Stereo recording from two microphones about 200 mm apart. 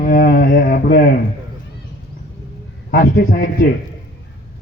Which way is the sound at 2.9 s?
50° left (ahead or behind).